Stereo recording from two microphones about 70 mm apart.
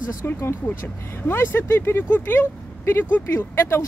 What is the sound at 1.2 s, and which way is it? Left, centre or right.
Speech, left.